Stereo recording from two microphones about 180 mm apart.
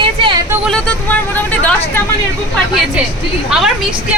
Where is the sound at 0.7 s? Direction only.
10° left (ahead or behind).